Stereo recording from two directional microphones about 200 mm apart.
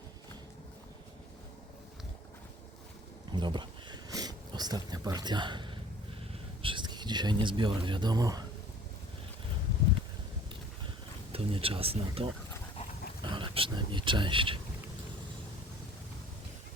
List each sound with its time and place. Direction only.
3.3 s a sound: 25° right (ahead or behind)
7.4 s speech: 25° right (ahead or behind)
11.3 s speech: 30° right (ahead or behind)